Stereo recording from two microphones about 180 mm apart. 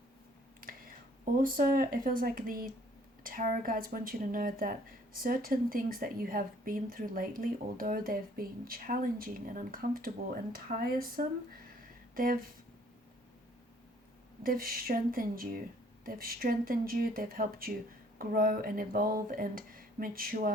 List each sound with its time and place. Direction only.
0.6 s speech: 50° right (ahead or behind)
14.4 s speech: 50° right (ahead or behind)